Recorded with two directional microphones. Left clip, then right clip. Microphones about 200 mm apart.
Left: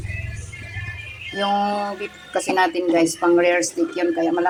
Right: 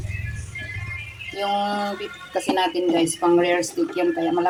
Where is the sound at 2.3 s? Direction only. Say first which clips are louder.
Left 3 dB; 10° left (ahead or behind).